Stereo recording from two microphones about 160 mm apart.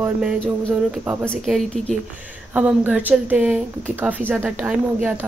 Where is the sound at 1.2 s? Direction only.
5° left (ahead or behind).